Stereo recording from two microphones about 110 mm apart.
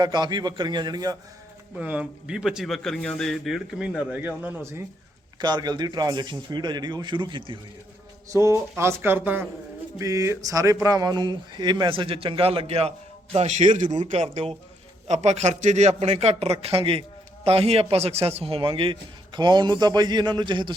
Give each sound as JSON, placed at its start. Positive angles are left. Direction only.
{"t": 0.0, "sound": "a man's voice", "side_deg": -40}
{"t": 1.8, "sound": "speech", "side_deg": -10}
{"t": 5.4, "sound": "a man's voice", "side_deg": -40}
{"t": 8.3, "sound": "speech", "side_deg": -30}
{"t": 10.0, "sound": "a man's voice", "side_deg": -30}
{"t": 13.3, "sound": "a man's voice", "side_deg": -80}